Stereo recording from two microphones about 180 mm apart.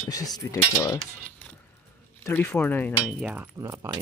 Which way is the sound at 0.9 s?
5° left (ahead or behind).